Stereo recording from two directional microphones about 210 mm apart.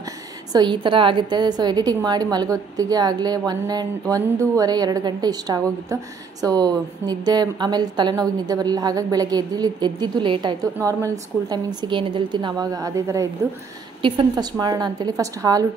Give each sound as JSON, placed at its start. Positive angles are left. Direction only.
{"t": 0.5, "sound": "a woman's voice", "side_deg": -20}